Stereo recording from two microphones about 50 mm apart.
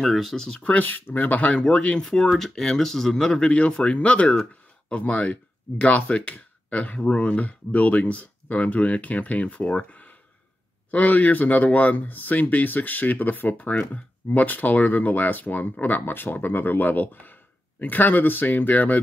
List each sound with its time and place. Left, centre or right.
0.0 s speech: centre
0.6 s speech: left
0.8 s speech: left
1.4 s speech: left
2.0 s speech: centre; by 18.9 s left